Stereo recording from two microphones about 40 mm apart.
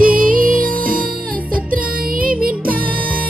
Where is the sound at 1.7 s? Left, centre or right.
Right.